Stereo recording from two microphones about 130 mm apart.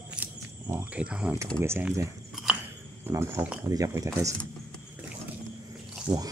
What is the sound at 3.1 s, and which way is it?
Speech, 20° right (ahead or behind).